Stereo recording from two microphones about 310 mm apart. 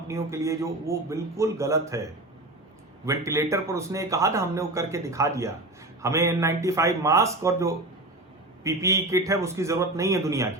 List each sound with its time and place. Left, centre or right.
0.1 s a man's voice: centre
3.1 s a man's voice: centre